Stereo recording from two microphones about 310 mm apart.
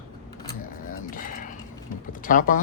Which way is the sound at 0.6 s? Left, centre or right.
Left.